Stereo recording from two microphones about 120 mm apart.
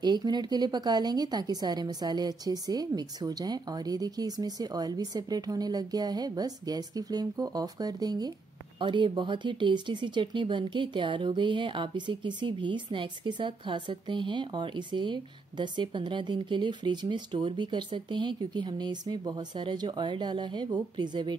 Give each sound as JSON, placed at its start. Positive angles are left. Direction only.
{"t": 0.0, "sound": "speech", "side_deg": -35}